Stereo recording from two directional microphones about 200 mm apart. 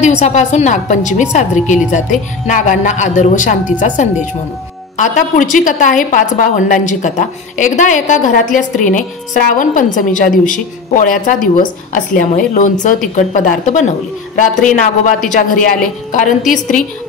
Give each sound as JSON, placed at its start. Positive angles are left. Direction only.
{"t": 0.0, "sound": "a woman's voice", "side_deg": 35}